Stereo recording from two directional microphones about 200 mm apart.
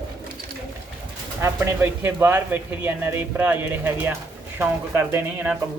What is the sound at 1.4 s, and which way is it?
Speech, 10° right (ahead or behind).